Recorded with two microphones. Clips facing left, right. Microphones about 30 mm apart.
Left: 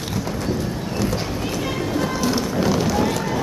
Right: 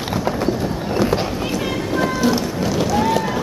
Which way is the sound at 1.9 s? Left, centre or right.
Centre.